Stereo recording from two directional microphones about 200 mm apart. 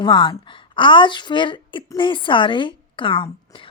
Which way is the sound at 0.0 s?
25° left (ahead or behind).